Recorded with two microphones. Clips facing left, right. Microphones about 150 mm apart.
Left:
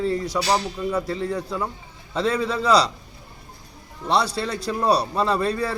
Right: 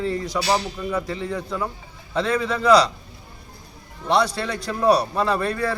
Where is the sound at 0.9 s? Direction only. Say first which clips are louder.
Left 1 dB; 10° left (ahead or behind).